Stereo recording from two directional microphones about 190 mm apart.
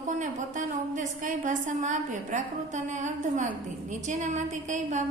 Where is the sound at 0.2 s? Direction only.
40° right (ahead or behind).